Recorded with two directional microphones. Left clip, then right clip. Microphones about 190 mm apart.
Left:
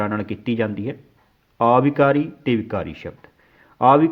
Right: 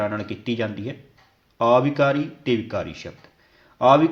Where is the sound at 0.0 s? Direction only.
35° left (ahead or behind).